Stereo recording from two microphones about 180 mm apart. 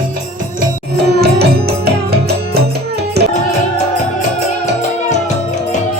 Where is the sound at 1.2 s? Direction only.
60° right (ahead or behind).